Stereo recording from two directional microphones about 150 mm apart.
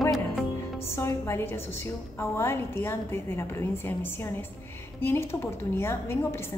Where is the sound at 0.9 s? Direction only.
15° left (ahead or behind).